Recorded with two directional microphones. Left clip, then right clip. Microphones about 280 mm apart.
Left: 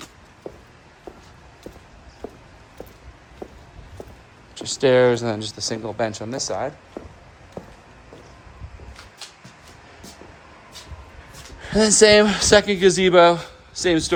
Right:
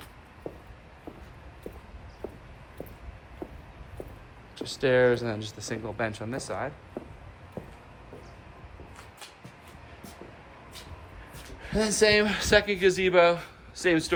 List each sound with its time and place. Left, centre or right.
4.5 s speech: left
11.6 s speech: left